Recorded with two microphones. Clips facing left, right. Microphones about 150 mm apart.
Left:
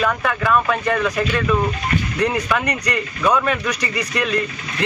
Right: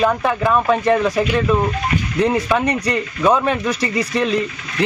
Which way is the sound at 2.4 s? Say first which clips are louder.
Right 4 dB; 25° right (ahead or behind).